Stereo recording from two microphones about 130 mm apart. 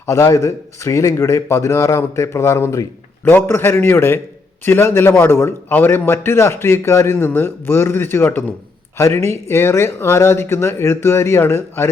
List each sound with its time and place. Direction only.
0.0 s a man's voice: 20° left (ahead or behind)